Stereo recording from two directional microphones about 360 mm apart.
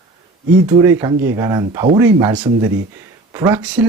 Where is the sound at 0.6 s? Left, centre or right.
Centre.